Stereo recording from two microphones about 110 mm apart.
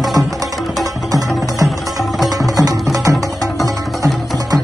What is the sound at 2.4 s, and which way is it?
Music, 30° right (ahead or behind).